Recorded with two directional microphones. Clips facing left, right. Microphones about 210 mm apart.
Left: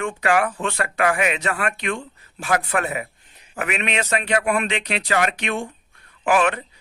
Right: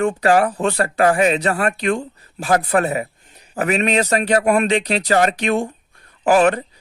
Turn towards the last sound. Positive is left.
turn(degrees=-40)  # may be behind; listen again after turning